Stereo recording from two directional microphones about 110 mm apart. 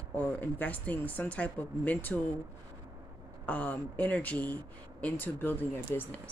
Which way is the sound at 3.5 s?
15° left (ahead or behind).